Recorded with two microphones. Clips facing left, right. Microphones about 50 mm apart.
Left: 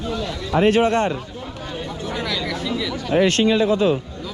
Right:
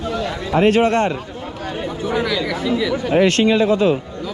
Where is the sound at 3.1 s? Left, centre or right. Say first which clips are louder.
Right 2 dB; right.